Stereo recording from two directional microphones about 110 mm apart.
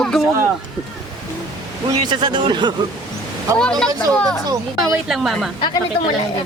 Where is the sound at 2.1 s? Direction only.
45° right (ahead or behind).